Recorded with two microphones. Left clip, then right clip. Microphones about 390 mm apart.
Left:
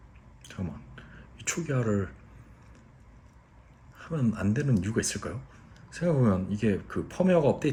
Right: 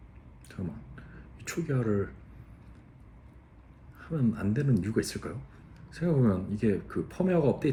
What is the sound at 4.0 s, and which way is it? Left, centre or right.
Speech, left.